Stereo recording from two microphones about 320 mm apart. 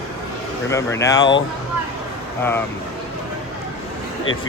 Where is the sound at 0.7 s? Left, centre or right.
Centre.